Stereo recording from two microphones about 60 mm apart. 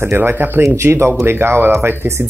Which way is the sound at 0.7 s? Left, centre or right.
Right.